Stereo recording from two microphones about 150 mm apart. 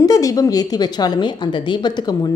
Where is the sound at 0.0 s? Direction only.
25° left (ahead or behind).